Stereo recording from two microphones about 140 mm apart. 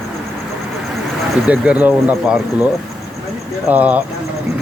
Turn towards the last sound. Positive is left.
turn(degrees=-10)  # may be behind; listen again after turning